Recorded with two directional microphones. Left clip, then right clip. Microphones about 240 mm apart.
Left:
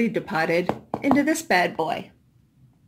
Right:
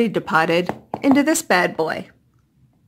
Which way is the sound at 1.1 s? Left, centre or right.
Right.